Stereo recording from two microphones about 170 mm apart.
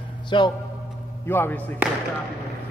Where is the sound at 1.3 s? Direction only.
10° left (ahead or behind).